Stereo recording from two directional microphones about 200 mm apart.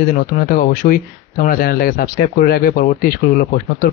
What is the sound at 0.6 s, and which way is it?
Speech, 40° left (ahead or behind).